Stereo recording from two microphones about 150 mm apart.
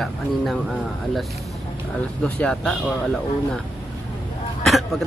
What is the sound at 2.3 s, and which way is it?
Speech, 5° left (ahead or behind).